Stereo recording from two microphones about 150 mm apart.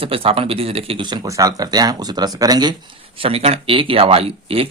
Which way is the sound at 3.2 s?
40° right (ahead or behind).